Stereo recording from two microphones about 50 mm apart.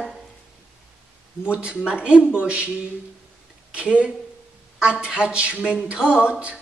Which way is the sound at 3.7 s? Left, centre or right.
Right.